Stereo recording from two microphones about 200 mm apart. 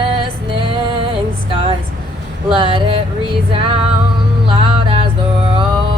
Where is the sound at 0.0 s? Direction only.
25° right (ahead or behind).